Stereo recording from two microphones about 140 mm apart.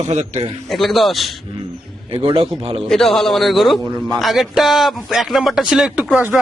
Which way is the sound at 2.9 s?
Centre (ahead or behind).